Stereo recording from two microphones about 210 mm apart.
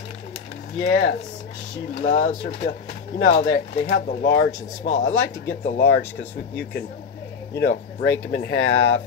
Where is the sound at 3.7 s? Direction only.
60° left (ahead or behind).